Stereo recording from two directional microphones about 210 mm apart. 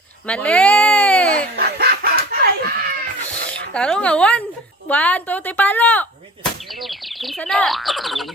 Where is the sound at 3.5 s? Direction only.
5° left (ahead or behind).